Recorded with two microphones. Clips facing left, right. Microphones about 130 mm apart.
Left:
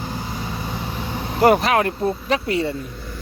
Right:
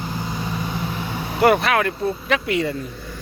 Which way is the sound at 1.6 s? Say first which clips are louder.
Left 1 dB; 35° left (ahead or behind).